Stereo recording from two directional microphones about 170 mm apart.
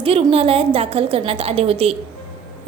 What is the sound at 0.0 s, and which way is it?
A woman's voice, 35° right (ahead or behind).